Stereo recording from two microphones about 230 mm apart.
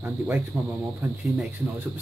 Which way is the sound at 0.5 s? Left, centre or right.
Centre.